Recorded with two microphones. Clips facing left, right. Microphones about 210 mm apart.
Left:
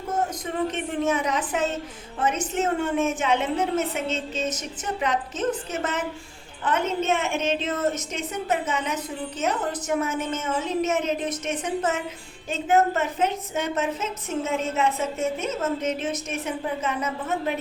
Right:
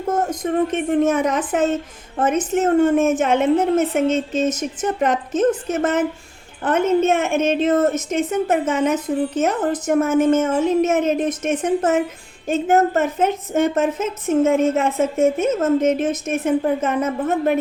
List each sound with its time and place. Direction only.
0.3 s a woman's voice: 50° right (ahead or behind)